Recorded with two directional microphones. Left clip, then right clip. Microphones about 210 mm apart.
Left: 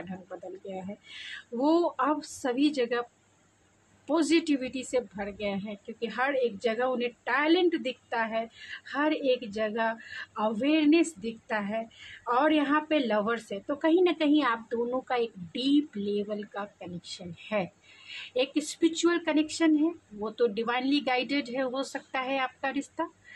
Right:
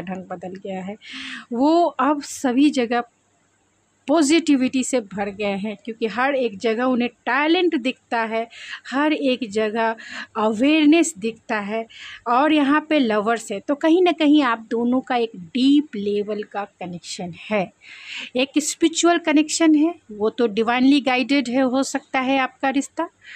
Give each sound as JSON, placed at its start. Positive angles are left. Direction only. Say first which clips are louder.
{"t": 0.7, "sound": "a woman's voice", "louder": "right 8 dB", "side_deg": -50}